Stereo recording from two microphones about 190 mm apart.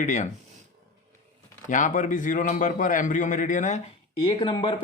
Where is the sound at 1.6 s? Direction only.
45° left (ahead or behind).